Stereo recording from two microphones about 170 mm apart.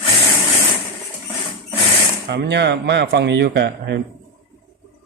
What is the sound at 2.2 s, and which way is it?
A man's voice, 90° right.